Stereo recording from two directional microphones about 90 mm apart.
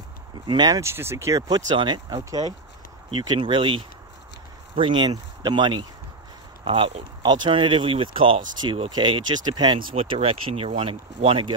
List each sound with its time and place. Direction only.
0.5 s speech: 55° right (ahead or behind)
0.7 s speech: 30° right (ahead or behind); by 2.4 s 45° right (ahead or behind)
3.1 s speech: 65° right (ahead or behind)
5.0 s speech: 55° right (ahead or behind)
6.6 s speech: 80° right
7.2 s speech: 65° right (ahead or behind)
8.9 s speech: 60° right (ahead or behind)
9.9 s speech: 90° right; by 11.5 s 75° right (ahead or behind)